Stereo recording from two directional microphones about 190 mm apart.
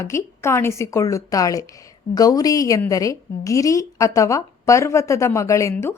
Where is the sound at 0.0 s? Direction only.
15° left (ahead or behind).